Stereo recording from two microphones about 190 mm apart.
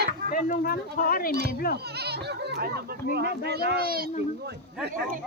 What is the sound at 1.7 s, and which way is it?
Speech, 60° right (ahead or behind).